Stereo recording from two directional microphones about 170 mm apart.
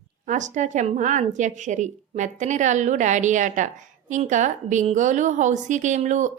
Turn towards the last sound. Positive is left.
turn(degrees=-45)  # may be behind; listen again after turning